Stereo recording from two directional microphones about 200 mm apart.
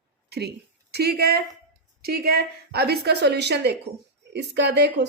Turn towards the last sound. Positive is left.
turn(degrees=-60)  # may be behind; listen again after turning